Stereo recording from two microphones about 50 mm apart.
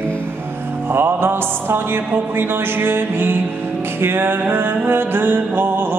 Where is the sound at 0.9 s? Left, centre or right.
Right.